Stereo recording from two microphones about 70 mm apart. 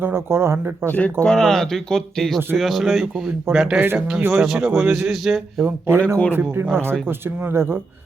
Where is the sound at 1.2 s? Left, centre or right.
Centre.